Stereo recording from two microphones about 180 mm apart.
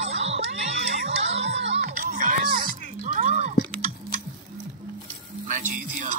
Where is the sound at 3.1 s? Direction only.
45° right (ahead or behind).